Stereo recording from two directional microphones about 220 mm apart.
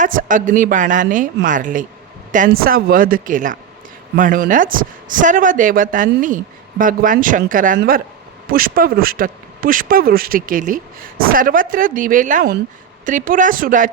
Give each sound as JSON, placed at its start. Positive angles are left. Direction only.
{"t": 0.0, "sound": "speech", "side_deg": -35}